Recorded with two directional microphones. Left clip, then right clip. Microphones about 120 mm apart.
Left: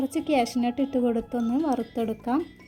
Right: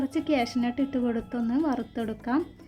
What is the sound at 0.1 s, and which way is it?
A woman's voice, 40° left (ahead or behind).